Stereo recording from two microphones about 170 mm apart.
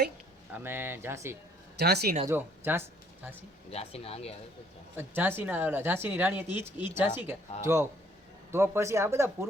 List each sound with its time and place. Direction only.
0.5 s speech: 15° right (ahead or behind)
1.8 s speech: 70° right (ahead or behind)
2.2 s speech: 15° right (ahead or behind)
3.7 s speech: 35° left (ahead or behind)
4.9 s speech: 10° right (ahead or behind)